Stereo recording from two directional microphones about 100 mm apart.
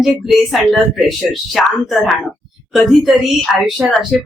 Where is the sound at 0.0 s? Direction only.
Centre (ahead or behind).